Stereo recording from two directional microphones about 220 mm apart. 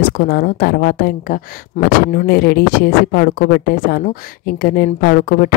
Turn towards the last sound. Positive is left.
turn(degrees=40)  # may be behind; listen again after turning